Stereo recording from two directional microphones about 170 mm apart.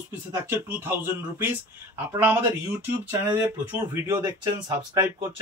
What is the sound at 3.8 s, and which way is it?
Speech, 20° right (ahead or behind).